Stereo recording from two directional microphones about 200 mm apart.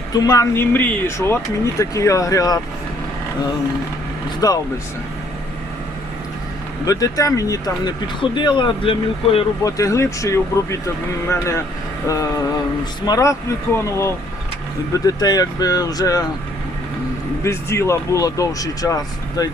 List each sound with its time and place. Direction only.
0.1 s speech: 20° left (ahead or behind)
4.4 s speech: 20° left (ahead or behind)
6.8 s speech: 15° left (ahead or behind)
9.6 s speech: 15° left (ahead or behind)
17.4 s speech: 15° left (ahead or behind)